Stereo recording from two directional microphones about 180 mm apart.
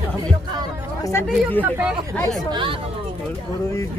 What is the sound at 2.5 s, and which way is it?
Speech, 30° right (ahead or behind).